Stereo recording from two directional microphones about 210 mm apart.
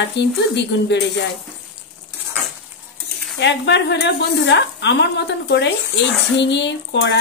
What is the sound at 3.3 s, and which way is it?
Speech, 55° left (ahead or behind).